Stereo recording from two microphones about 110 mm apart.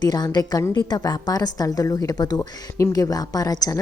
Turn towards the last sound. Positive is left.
turn(degrees=35)  # may be behind; listen again after turning